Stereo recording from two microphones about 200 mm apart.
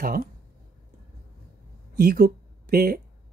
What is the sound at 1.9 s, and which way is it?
Speech, 50° right (ahead or behind).